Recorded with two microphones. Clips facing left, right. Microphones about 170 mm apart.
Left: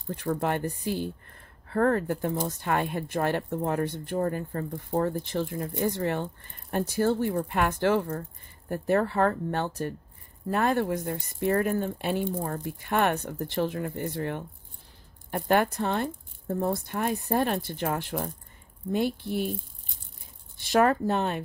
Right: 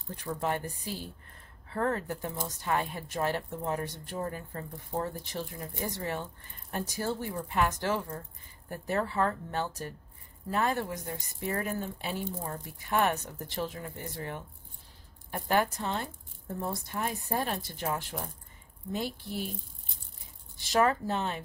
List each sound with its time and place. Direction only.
0.1 s speech: 70° left (ahead or behind)
1.7 s speech: 55° left (ahead or behind)
20.6 s speech: 55° left (ahead or behind)